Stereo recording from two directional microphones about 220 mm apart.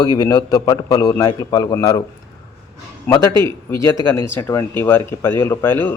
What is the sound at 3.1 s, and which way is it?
Speech, 10° left (ahead or behind).